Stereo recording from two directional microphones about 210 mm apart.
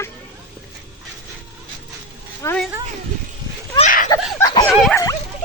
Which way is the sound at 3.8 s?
40° left (ahead or behind).